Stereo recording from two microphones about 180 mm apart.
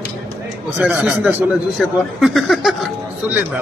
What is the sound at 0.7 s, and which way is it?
A man's voice, 10° right (ahead or behind).